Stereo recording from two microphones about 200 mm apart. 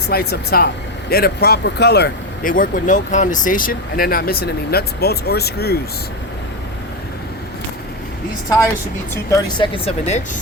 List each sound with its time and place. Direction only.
0.1 s speech: 50° left (ahead or behind)
9.3 s speech: 25° left (ahead or behind)